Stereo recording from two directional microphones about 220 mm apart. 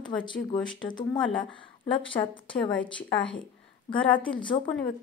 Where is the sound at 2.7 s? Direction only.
5° left (ahead or behind).